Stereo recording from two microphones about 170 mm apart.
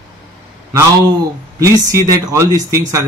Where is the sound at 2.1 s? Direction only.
20° right (ahead or behind).